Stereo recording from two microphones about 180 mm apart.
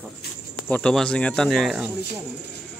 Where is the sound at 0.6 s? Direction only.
5° left (ahead or behind).